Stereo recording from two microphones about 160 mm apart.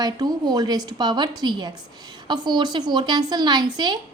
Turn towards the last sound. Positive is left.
turn(degrees=-25)  # may be behind; listen again after turning